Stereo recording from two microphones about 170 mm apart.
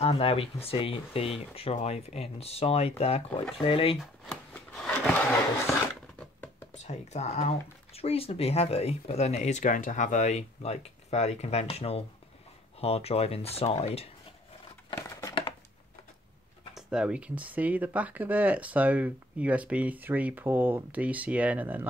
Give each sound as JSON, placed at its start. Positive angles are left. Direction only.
{"t": 0.0, "sound": "speech", "side_deg": 35}
{"t": 4.0, "sound": "a sound", "side_deg": 5}
{"t": 6.7, "sound": "speech", "side_deg": 40}
{"t": 15.0, "sound": "crumpling", "side_deg": 15}
{"t": 16.7, "sound": "speech", "side_deg": -5}